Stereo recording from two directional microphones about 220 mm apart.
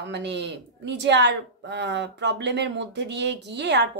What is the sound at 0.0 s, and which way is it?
A woman's voice, 50° right (ahead or behind).